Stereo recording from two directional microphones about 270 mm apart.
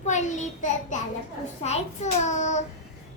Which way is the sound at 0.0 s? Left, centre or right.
Left.